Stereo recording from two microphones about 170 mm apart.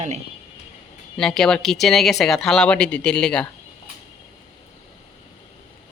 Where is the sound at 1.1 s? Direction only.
5° left (ahead or behind).